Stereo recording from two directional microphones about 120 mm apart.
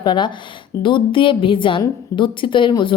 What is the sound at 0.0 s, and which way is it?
A woman's voice, 40° left (ahead or behind).